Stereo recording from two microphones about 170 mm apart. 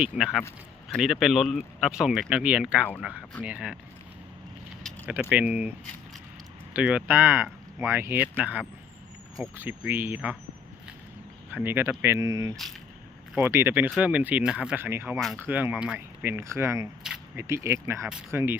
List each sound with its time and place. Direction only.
0.0 s speech: 5° right (ahead or behind)
5.3 s speech: 10° right (ahead or behind)
6.7 s speech: 10° right (ahead or behind)
11.5 s speech: 10° right (ahead or behind)